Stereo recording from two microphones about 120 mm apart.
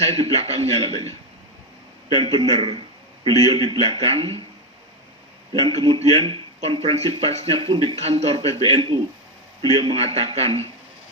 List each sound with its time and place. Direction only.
0.2 s a man's voice: 55° right (ahead or behind)
2.0 s speech: 45° right (ahead or behind)
5.5 s a man's voice: 40° right (ahead or behind)
7.9 s a man's voice: 60° right (ahead or behind)